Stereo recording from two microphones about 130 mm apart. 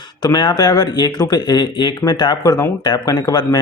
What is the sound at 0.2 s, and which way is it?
Speech, 30° left (ahead or behind).